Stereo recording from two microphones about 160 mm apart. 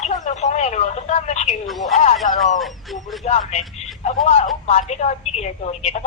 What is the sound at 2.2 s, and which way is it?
A woman's voice, 50° left (ahead or behind).